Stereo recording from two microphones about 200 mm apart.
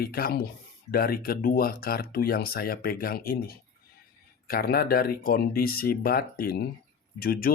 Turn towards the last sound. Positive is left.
turn(degrees=45)  # may be behind; listen again after turning